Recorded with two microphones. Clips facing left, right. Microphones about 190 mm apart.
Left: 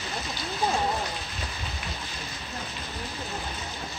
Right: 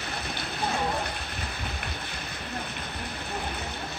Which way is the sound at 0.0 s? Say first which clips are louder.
Left 1 dB; 60° right (ahead or behind).